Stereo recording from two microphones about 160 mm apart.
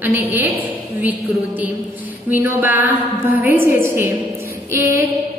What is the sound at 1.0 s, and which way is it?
A woman's voice, 10° right (ahead or behind).